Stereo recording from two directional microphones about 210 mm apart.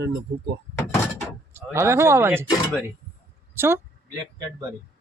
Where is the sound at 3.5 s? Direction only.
10° right (ahead or behind).